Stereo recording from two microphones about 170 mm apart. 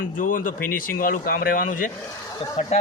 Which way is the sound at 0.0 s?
55° left (ahead or behind).